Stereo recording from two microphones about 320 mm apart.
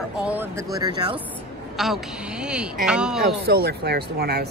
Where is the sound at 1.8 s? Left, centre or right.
Centre.